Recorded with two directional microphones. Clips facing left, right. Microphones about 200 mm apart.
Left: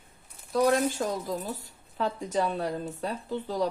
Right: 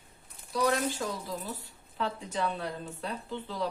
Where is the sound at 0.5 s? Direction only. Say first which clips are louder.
Left 5 dB; 50° left (ahead or behind).